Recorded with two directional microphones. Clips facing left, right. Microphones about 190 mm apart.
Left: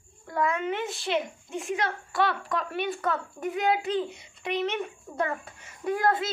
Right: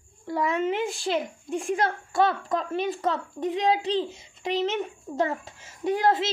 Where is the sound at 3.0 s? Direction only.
20° right (ahead or behind).